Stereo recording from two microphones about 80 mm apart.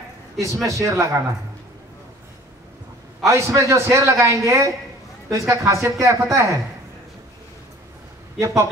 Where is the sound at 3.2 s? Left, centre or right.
Right.